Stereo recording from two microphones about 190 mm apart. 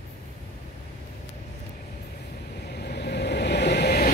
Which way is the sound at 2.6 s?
55° left (ahead or behind).